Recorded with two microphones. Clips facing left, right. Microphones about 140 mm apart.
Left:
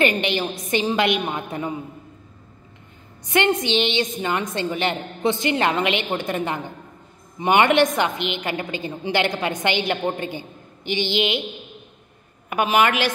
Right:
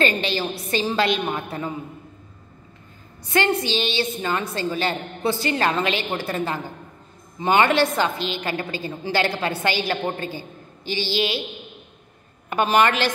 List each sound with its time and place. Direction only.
0.0 s a woman's voice: 20° left (ahead or behind)
3.3 s a woman's voice: 20° left (ahead or behind)
12.4 s a woman's voice: 10° left (ahead or behind)